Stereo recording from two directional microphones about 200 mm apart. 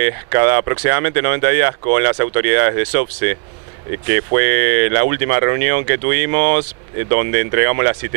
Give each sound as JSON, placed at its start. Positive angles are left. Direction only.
{"t": 0.0, "sound": "speech", "side_deg": -15}
{"t": 4.4, "sound": "speech", "side_deg": -15}